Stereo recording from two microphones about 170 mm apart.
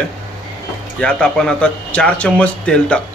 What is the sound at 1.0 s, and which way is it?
A man's voice, 5° left (ahead or behind).